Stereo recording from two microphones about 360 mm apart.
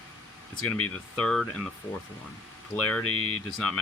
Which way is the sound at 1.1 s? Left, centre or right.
Centre.